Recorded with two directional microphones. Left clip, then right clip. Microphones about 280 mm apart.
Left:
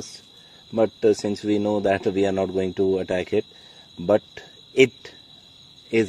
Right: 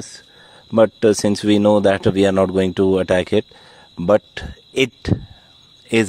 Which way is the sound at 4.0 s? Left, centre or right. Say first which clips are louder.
Right 5 dB; right.